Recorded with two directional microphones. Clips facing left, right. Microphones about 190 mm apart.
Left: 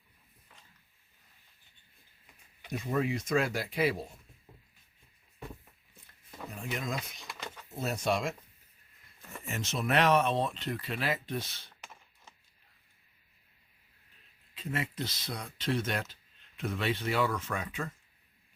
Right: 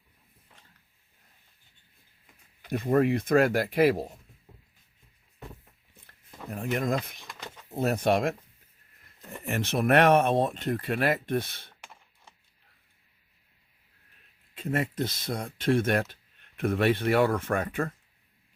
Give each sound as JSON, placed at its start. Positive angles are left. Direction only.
{"t": 2.6, "sound": "speech", "side_deg": -60}
{"t": 6.5, "sound": "speech", "side_deg": -55}
{"t": 9.4, "sound": "speech", "side_deg": -60}
{"t": 14.5, "sound": "speech", "side_deg": -50}